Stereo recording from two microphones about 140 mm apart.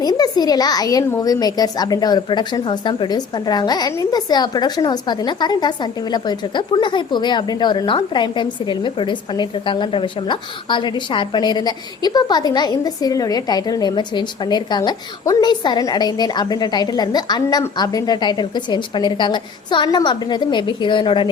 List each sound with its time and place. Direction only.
0.0 s speech: 30° left (ahead or behind)